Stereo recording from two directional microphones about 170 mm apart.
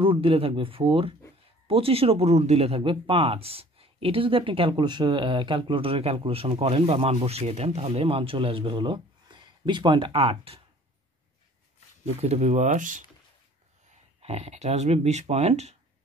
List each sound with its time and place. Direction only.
0.0 s speech: 30° right (ahead or behind)
12.0 s speech: 40° right (ahead or behind)
14.2 s speech: 40° right (ahead or behind)